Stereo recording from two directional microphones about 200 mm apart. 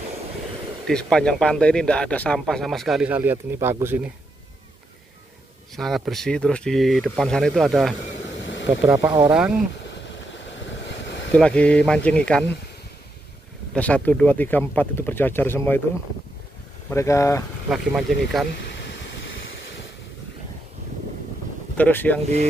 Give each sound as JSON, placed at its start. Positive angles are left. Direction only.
{"t": 0.8, "sound": "speech", "side_deg": 5}
{"t": 5.8, "sound": "speech", "side_deg": 0}
{"t": 8.4, "sound": "a sound", "side_deg": 65}
{"t": 8.8, "sound": "speech", "side_deg": -10}
{"t": 11.3, "sound": "speech", "side_deg": 5}
{"t": 13.7, "sound": "speech", "side_deg": 5}
{"t": 16.9, "sound": "speech", "side_deg": 15}
{"t": 17.6, "sound": "speech", "side_deg": 0}
{"t": 21.7, "sound": "speech", "side_deg": 10}